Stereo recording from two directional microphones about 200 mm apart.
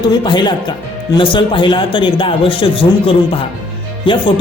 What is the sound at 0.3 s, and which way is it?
Speech, 20° left (ahead or behind).